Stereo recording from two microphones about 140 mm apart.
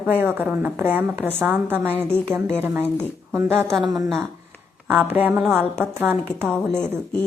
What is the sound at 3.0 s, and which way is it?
Speech, 5° left (ahead or behind).